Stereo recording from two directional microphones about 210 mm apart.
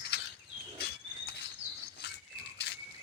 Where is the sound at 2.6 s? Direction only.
55° left (ahead or behind).